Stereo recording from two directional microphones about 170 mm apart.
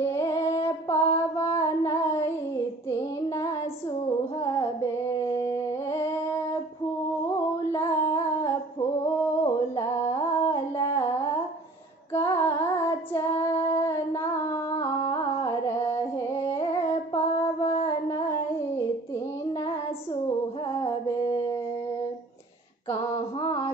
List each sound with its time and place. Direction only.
0.0 s music: 15° left (ahead or behind)
4.4 s a sound: 20° left (ahead or behind)
7.7 s humming: 15° left (ahead or behind)
9.0 s a sound: 20° left (ahead or behind)
12.1 s female singing: 15° left (ahead or behind)
20.8 s mantra: 20° left (ahead or behind)
22.8 s female singing: 25° left (ahead or behind)